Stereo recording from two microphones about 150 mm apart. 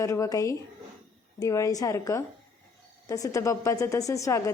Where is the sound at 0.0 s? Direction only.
20° left (ahead or behind).